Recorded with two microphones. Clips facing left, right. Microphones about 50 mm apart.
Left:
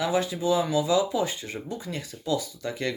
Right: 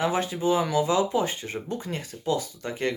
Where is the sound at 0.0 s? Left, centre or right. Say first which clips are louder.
Even; right.